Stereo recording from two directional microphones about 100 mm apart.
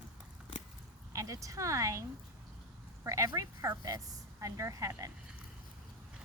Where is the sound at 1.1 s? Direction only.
35° right (ahead or behind).